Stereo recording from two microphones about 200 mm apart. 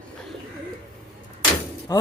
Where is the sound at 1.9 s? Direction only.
20° left (ahead or behind).